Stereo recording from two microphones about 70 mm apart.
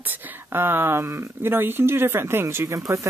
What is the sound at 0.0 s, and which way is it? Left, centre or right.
Speech, right.